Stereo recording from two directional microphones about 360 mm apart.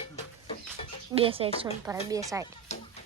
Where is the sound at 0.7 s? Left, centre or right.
Centre.